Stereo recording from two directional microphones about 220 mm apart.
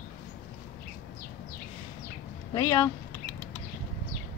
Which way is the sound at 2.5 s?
15° left (ahead or behind).